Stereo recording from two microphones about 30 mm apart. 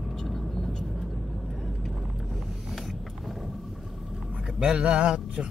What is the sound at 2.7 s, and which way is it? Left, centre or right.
Vehicle, centre.